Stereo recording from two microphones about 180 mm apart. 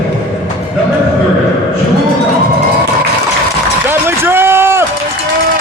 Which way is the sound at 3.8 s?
15° right (ahead or behind).